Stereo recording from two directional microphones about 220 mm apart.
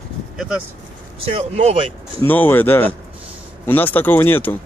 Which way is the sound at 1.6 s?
30° right (ahead or behind).